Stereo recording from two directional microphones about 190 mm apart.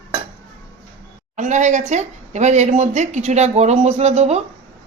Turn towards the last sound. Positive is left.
turn(degrees=-35)  # may be behind; listen again after turning